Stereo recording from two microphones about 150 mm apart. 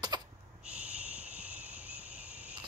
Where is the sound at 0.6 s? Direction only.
10° right (ahead or behind).